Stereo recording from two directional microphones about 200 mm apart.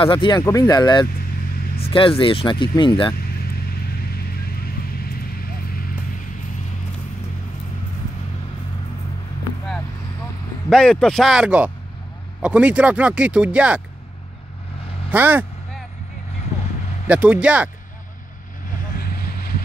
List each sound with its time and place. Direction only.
0.0 s speech: 25° left (ahead or behind)
10.7 s speech: 5° left (ahead or behind)
15.0 s speech: 10° right (ahead or behind)
17.1 s speech: 5° right (ahead or behind)
19.1 s vehicle: 50° left (ahead or behind)